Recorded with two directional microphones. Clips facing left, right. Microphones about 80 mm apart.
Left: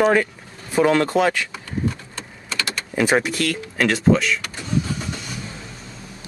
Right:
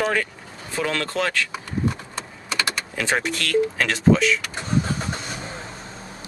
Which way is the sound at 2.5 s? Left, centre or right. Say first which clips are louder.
Right 2 dB; right.